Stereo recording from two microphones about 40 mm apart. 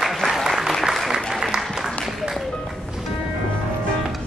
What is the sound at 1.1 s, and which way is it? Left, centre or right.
Applause, centre.